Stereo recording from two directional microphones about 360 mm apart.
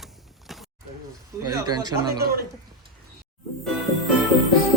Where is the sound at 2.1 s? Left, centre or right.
Right.